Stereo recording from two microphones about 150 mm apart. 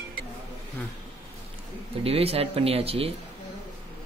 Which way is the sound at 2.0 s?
40° right (ahead or behind).